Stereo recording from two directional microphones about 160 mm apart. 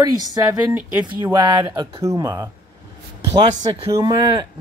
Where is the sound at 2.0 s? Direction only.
20° right (ahead or behind).